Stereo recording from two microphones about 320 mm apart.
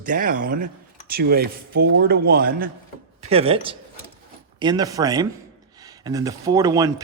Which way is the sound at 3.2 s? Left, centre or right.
Centre.